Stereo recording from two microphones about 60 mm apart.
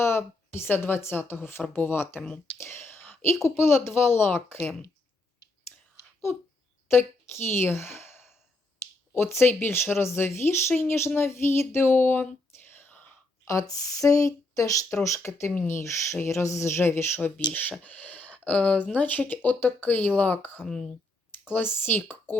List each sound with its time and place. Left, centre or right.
0.0 s speech: left
2.6 s whispering: left
3.8 s speech: left
6.8 s speech: left
12.6 s whispering: left
13.4 s speech: left
15.0 s speech: left
17.3 s speech: left
20.7 s speech: centre
21.4 s speech: left